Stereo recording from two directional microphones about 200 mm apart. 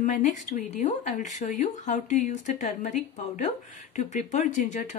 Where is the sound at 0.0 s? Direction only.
40° left (ahead or behind).